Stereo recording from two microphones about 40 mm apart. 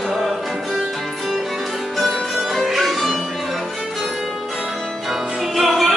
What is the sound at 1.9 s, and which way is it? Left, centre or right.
Music, centre.